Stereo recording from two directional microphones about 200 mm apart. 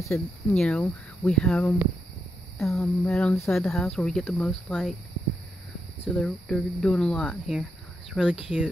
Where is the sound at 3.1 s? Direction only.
5° left (ahead or behind).